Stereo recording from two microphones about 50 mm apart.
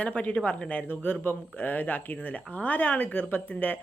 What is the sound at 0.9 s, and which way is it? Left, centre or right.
Speech, left.